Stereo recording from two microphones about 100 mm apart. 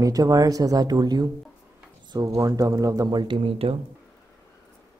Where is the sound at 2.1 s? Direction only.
35° right (ahead or behind).